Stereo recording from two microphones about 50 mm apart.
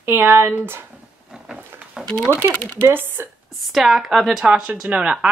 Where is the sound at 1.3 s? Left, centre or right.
Centre.